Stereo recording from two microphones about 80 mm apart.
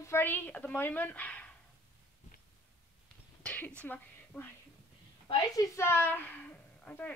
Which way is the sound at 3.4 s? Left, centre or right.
Left.